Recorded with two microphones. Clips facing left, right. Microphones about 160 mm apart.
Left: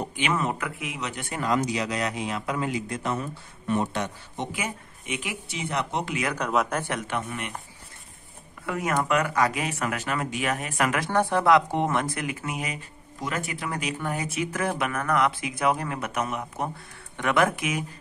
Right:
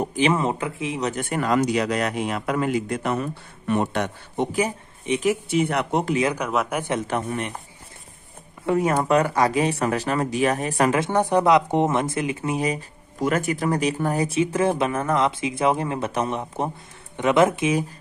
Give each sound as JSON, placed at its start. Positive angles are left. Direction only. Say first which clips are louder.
{"t": 0.1, "sound": "speech", "louder": "right 8 dB", "side_deg": -35}
{"t": 0.4, "sound": "speech", "louder": "right 4 dB", "side_deg": -25}
{"t": 1.3, "sound": "a man's voice", "louder": "right 4 dB", "side_deg": -60}
{"t": 4.5, "sound": "speech", "louder": "right 9 dB", "side_deg": -35}
{"t": 6.3, "sound": "speech", "louder": "right 1 dB", "side_deg": -5}
{"t": 6.8, "sound": "speech", "louder": "right 5 dB", "side_deg": -20}
{"t": 7.1, "sound": "speech", "louder": "right 5 dB", "side_deg": -35}
{"t": 8.6, "sound": "speech", "louder": "right 6 dB", "side_deg": -30}
{"t": 13.2, "sound": "speech", "louder": "right 9 dB", "side_deg": -45}